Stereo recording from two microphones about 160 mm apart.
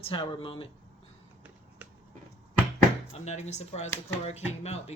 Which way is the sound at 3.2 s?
45° left (ahead or behind).